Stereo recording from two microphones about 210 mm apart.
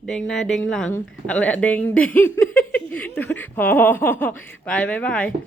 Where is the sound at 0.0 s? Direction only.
5° left (ahead or behind).